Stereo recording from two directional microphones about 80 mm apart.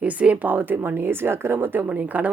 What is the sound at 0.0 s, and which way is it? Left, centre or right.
A woman's voice, centre.